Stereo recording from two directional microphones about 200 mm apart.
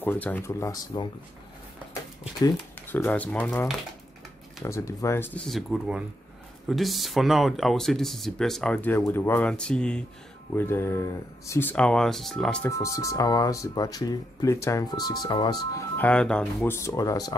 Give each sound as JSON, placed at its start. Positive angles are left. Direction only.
{"t": 0.0, "sound": "speech", "side_deg": 10}
{"t": 2.4, "sound": "speech", "side_deg": 10}
{"t": 4.6, "sound": "speech", "side_deg": 15}
{"t": 12.6, "sound": "speech", "side_deg": 15}